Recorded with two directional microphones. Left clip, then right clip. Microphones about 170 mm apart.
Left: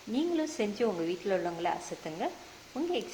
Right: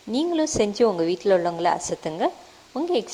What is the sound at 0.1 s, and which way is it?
A woman's voice, 45° right (ahead or behind).